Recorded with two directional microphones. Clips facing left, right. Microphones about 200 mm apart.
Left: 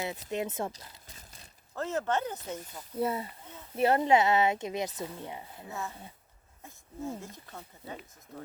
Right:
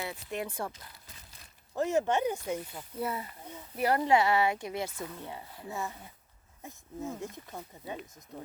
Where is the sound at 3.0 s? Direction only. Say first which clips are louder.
Left 4 dB; 25° left (ahead or behind).